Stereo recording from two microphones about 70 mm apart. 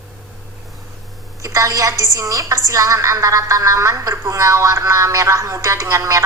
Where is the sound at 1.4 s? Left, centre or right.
Right.